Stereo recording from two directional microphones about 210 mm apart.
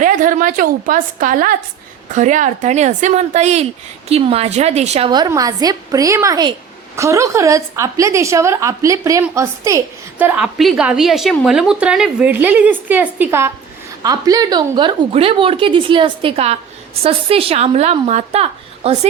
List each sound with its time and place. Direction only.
0.0 s a woman's voice: 40° right (ahead or behind)